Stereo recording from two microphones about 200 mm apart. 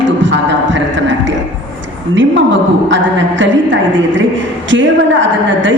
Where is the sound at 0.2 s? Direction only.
65° right (ahead or behind).